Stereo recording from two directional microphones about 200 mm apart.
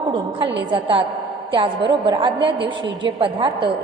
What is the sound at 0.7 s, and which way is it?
A woman's voice, 25° right (ahead or behind).